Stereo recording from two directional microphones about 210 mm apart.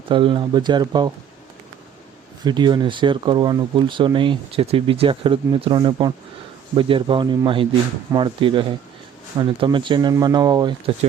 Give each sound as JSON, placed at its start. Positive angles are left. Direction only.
{"t": 0.1, "sound": "speech", "side_deg": -25}
{"t": 2.4, "sound": "speech", "side_deg": -20}